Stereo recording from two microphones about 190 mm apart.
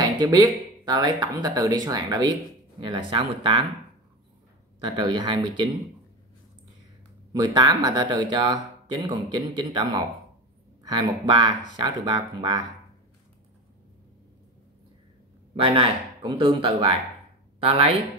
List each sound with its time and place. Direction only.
0.0 s a sound: 20° right (ahead or behind)
0.8 s speech: 20° right (ahead or behind)
4.7 s speech: 25° right (ahead or behind)
7.3 s speech: 20° right (ahead or behind)
15.5 s speech: 30° right (ahead or behind)